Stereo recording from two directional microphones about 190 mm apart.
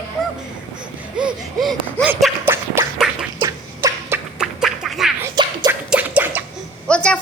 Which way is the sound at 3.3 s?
15° right (ahead or behind).